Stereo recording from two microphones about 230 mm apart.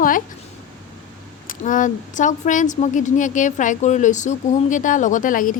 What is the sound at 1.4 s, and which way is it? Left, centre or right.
Speech, left.